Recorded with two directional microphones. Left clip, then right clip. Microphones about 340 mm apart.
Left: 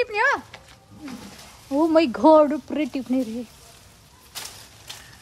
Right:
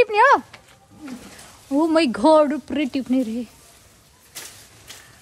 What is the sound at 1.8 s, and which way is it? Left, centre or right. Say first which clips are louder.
Speech: left 1 dB; right.